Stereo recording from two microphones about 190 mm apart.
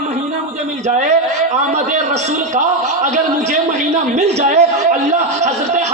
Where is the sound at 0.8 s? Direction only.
35° right (ahead or behind).